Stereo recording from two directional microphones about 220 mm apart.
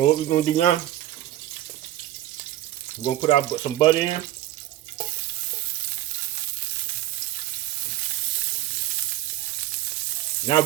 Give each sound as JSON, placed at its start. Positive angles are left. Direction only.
{"t": 0.0, "sound": "speech", "side_deg": 30}
{"t": 3.0, "sound": "speech", "side_deg": 25}